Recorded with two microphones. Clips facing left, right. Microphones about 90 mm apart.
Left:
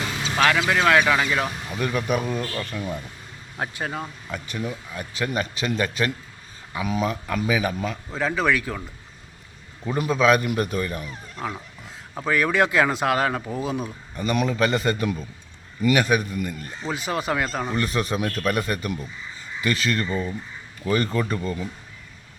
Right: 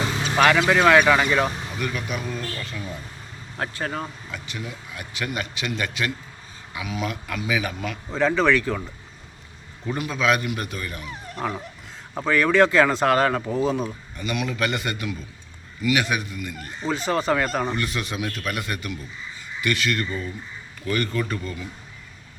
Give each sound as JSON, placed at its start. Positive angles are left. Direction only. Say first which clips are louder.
{"t": 0.3, "sound": "speech", "louder": "right 3 dB", "side_deg": -5}
{"t": 1.8, "sound": "speech", "louder": "left 6 dB", "side_deg": 40}
{"t": 3.6, "sound": "speech", "louder": "even", "side_deg": 15}
{"t": 4.3, "sound": "speech", "louder": "left 4 dB", "side_deg": 40}
{"t": 8.1, "sound": "speech", "louder": "right 4 dB", "side_deg": 5}
{"t": 10.0, "sound": "speech", "louder": "left 4 dB", "side_deg": 35}
{"t": 12.2, "sound": "speech", "louder": "right 3 dB", "side_deg": 10}
{"t": 14.2, "sound": "speech", "louder": "left 4 dB", "side_deg": 35}
{"t": 16.8, "sound": "speech", "louder": "right 3 dB", "side_deg": 10}
{"t": 17.4, "sound": "speech", "louder": "right 2 dB", "side_deg": 0}
{"t": 17.7, "sound": "speech", "louder": "left 4 dB", "side_deg": 40}